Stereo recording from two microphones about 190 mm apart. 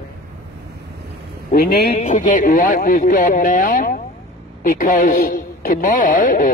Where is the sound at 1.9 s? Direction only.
40° left (ahead or behind).